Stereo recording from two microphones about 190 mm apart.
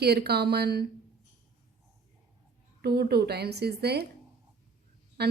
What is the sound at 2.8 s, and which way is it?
A woman's voice, 60° right (ahead or behind).